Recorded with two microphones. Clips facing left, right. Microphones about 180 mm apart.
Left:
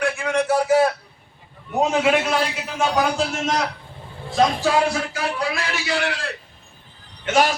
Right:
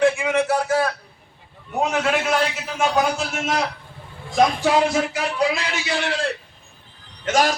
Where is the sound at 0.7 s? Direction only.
25° left (ahead or behind).